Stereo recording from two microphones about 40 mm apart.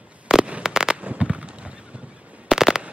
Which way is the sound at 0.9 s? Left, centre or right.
Right.